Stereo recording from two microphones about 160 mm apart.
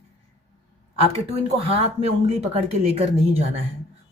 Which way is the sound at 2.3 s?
40° right (ahead or behind).